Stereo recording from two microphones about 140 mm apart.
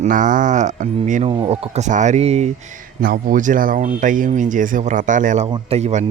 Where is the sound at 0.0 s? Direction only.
65° right (ahead or behind).